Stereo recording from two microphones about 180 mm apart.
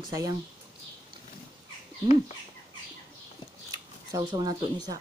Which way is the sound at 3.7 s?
20° right (ahead or behind).